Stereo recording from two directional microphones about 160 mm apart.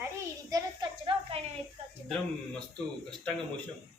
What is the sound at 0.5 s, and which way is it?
Speech, 30° right (ahead or behind).